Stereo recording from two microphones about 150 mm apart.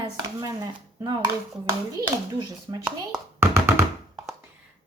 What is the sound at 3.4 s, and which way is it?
Hands, 15° right (ahead or behind).